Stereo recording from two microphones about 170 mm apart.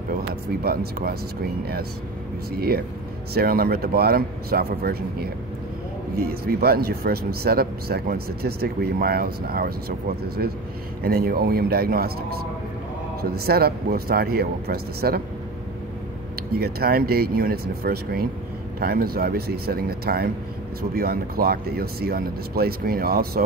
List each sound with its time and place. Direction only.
0.3 s speech: 65° right (ahead or behind)
3.3 s speech: 60° right (ahead or behind)
16.5 s speech: 65° right (ahead or behind)